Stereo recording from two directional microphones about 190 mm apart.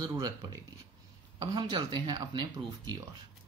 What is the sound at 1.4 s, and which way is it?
Mantra, 25° right (ahead or behind).